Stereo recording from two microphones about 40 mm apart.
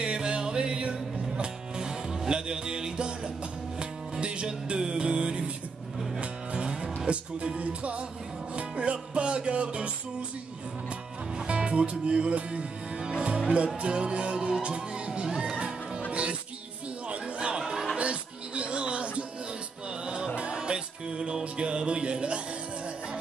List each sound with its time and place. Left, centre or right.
0.0 s music: right
4.2 s music: right
11.3 s music: right
13.7 s speech: right
15.2 s music: centre
17.1 s chatter: right
17.9 s music: right
20.3 s music: right